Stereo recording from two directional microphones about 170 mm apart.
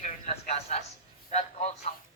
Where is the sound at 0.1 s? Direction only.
40° left (ahead or behind).